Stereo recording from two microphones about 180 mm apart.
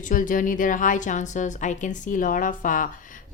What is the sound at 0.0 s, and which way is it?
A woman's voice, 45° left (ahead or behind).